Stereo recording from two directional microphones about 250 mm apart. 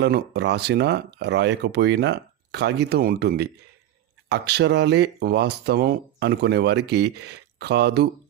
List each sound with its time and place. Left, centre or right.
0.0 s speech: right